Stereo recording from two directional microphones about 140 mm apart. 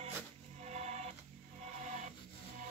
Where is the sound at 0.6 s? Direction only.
50° right (ahead or behind).